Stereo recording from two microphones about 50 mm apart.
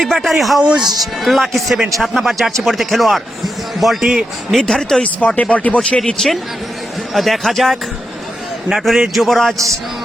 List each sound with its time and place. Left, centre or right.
0.0 s speech: centre
0.6 s speech: centre
1.2 s speech: centre
4.6 s speech: centre
5.0 s speech: left
6.2 s speech: centre
7.1 s speech: centre